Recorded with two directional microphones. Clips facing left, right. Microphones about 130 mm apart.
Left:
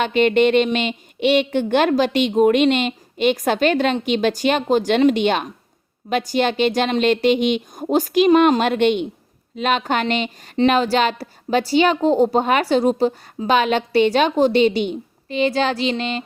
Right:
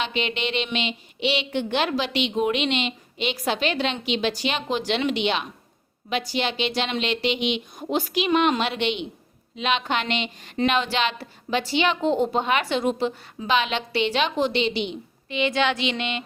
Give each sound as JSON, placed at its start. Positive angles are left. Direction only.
{"t": 0.0, "sound": "a woman's voice", "side_deg": 50}